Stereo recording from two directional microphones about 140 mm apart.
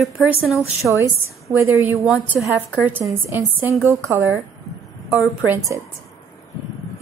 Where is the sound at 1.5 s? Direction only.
15° right (ahead or behind).